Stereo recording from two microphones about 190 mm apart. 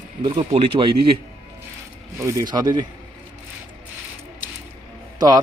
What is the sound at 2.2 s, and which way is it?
Speech, 15° right (ahead or behind).